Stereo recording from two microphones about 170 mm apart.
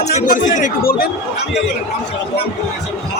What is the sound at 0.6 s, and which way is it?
Speech, 55° left (ahead or behind).